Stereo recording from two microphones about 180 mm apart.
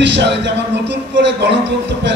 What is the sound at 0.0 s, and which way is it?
Speech, 75° right (ahead or behind).